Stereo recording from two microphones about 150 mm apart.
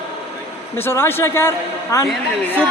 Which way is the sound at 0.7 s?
15° left (ahead or behind).